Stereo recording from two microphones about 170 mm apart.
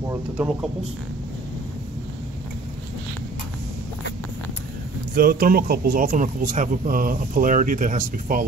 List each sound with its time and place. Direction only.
5.1 s speech: 60° right (ahead or behind)